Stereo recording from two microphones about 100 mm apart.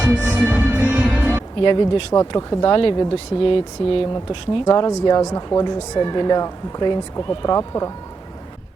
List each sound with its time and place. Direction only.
0.0 s music: 15° right (ahead or behind)
1.6 s speech: 55° left (ahead or behind)
2.3 s speech: 45° left (ahead or behind); by 4.0 s 60° left (ahead or behind)
4.3 s speech: 45° left (ahead or behind)